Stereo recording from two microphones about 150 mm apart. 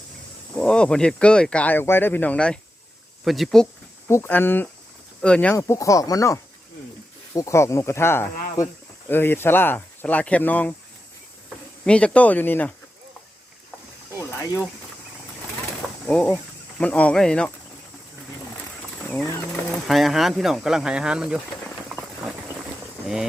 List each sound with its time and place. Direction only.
0.5 s speech: 5° left (ahead or behind)
4.1 s speech: 15° left (ahead or behind)
5.5 s speech: 20° left (ahead or behind)
11.9 s speech: 5° left (ahead or behind)
14.3 s a sound: 15° left (ahead or behind)
16.0 s speech: 10° left (ahead or behind)
19.0 s speech: 10° left (ahead or behind)